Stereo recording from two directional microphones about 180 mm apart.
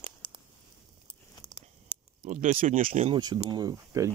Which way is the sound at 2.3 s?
40° right (ahead or behind).